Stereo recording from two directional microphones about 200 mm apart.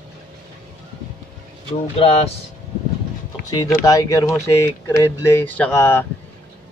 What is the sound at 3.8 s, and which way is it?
Speech, 15° left (ahead or behind).